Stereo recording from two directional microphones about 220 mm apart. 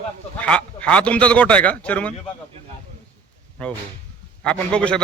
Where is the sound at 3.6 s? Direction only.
5° left (ahead or behind).